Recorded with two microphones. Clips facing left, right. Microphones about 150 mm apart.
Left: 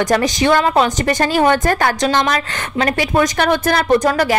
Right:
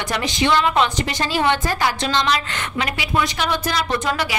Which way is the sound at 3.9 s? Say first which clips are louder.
Left 8 dB; 40° left (ahead or behind).